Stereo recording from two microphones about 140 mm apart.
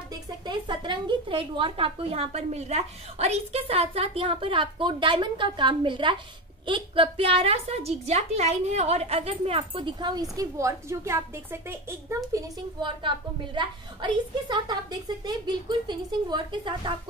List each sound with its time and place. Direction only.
0.1 s a woman's voice: 35° right (ahead or behind)
13.6 s a woman's voice: 35° right (ahead or behind)